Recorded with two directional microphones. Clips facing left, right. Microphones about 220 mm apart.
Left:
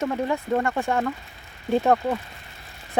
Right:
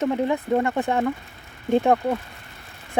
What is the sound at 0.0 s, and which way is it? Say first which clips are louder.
Speech: right 3 dB; 15° right (ahead or behind).